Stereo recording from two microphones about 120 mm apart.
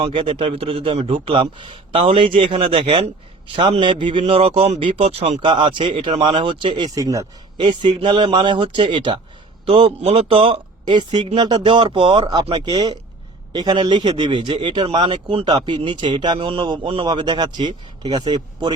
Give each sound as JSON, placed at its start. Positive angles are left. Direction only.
{"t": 0.0, "sound": "a man's voice", "side_deg": -45}
{"t": 5.4, "sound": "a man's voice", "side_deg": -45}
{"t": 6.9, "sound": "speech", "side_deg": -30}
{"t": 7.6, "sound": "speech", "side_deg": -40}
{"t": 9.6, "sound": "a man's voice", "side_deg": -50}
{"t": 12.5, "sound": "speech", "side_deg": -55}
{"t": 12.7, "sound": "a man's voice", "side_deg": -35}
{"t": 15.4, "sound": "speech", "side_deg": -35}